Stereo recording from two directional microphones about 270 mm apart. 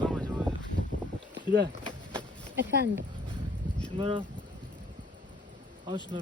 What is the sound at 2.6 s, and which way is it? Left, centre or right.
Speech, right.